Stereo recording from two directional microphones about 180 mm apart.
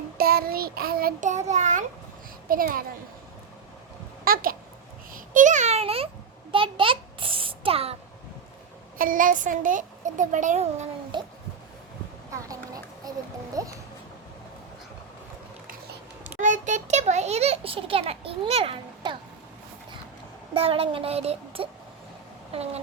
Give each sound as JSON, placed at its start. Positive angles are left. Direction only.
{"t": 0.2, "sound": "child singing", "side_deg": -55}
{"t": 2.5, "sound": "a woman's voice", "side_deg": -50}
{"t": 4.2, "sound": "a sound", "side_deg": -55}
{"t": 5.1, "sound": "a child's voice", "side_deg": -45}
{"t": 6.5, "sound": "a sound", "side_deg": -30}
{"t": 9.0, "sound": "a woman's voice", "side_deg": -50}
{"t": 11.1, "sound": "a child's voice", "side_deg": -25}
{"t": 12.3, "sound": "speech", "side_deg": -20}
{"t": 16.4, "sound": "a child's voice", "side_deg": -45}
{"t": 20.5, "sound": "a child's voice", "side_deg": -30}